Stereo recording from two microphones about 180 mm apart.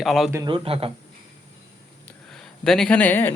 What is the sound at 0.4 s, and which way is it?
Speech, 30° right (ahead or behind).